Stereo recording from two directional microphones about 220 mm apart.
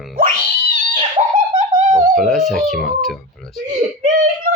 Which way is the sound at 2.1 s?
Centre (ahead or behind).